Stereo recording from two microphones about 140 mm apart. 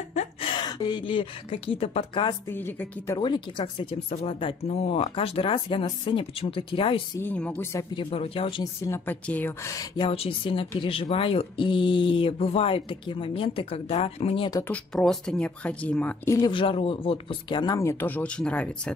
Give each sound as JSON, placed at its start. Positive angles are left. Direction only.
{"t": 0.1, "sound": "gasp", "side_deg": 55}
{"t": 0.5, "sound": "speech", "side_deg": 30}
{"t": 2.5, "sound": "speech", "side_deg": 15}
{"t": 3.2, "sound": "speech", "side_deg": 35}
{"t": 3.9, "sound": "speech", "side_deg": 45}
{"t": 7.2, "sound": "speech", "side_deg": 10}
{"t": 7.9, "sound": "speech", "side_deg": 40}
{"t": 8.8, "sound": "speech", "side_deg": 15}
{"t": 10.0, "sound": "speech", "side_deg": 40}
{"t": 14.7, "sound": "speech", "side_deg": 5}
{"t": 16.3, "sound": "speech", "side_deg": 35}